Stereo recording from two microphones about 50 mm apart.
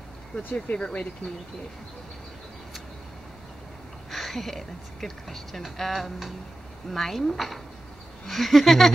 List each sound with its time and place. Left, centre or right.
0.6 s speech: centre
4.1 s a woman's voice: centre